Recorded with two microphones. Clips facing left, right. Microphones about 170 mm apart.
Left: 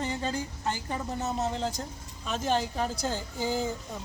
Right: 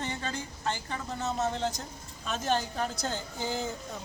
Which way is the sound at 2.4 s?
Centre (ahead or behind).